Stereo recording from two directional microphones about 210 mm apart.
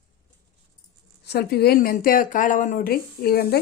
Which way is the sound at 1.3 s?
50° left (ahead or behind).